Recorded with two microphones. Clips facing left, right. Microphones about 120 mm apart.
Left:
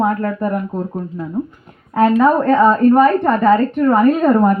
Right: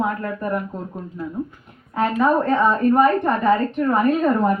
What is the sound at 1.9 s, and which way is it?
Speech, 65° left (ahead or behind).